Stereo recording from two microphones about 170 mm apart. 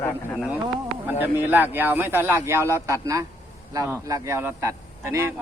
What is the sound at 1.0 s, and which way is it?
Speech, 10° right (ahead or behind).